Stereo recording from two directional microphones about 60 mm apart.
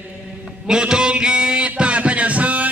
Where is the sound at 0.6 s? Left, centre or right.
Centre.